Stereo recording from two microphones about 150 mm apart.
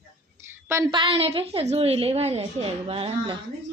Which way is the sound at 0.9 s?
40° right (ahead or behind).